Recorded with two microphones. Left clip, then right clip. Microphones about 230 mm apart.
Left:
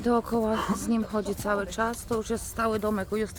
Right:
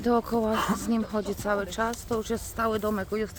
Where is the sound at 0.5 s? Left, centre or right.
Right.